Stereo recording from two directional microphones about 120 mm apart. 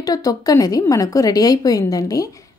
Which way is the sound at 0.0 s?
30° left (ahead or behind).